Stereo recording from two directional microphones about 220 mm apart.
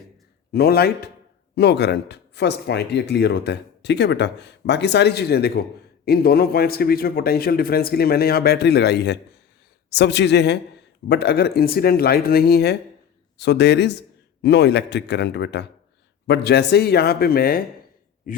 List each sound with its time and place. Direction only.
0.5 s speech: 45° left (ahead or behind)